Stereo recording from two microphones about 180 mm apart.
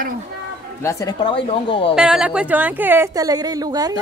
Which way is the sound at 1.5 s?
30° left (ahead or behind).